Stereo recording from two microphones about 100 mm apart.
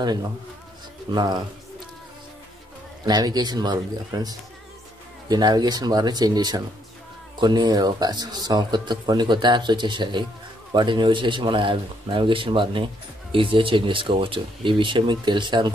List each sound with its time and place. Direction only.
1.1 s speech: 45° right (ahead or behind)
3.1 s a man's voice: 40° right (ahead or behind)